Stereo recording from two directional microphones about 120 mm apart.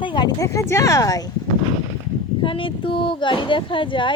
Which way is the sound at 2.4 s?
45° left (ahead or behind).